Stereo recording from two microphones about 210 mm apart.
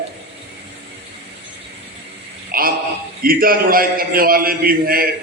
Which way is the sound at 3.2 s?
45° right (ahead or behind).